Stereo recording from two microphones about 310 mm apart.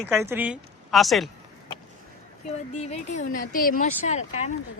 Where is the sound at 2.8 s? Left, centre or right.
Left.